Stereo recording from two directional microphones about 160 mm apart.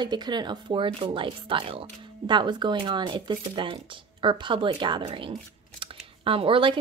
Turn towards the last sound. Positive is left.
turn(degrees=-30)  # may be behind; listen again after turning